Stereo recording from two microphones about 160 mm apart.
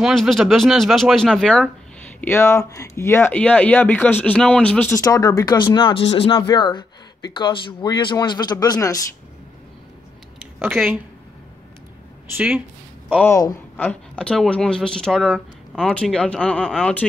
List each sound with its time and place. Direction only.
0.0 s speech: centre (ahead or behind)
2.1 s speech: 15° left (ahead or behind)
5.0 s speech: 25° left (ahead or behind)
10.7 s speech: centre (ahead or behind)
12.4 s a woman's voice: 10° right (ahead or behind)
13.7 s speech: 10° left (ahead or behind)